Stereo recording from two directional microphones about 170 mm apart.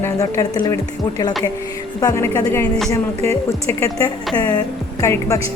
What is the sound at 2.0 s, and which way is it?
Music, 20° left (ahead or behind).